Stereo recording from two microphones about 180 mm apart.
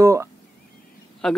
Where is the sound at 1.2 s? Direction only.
5° left (ahead or behind).